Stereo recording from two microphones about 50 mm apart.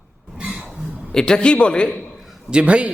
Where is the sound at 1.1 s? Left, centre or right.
Centre.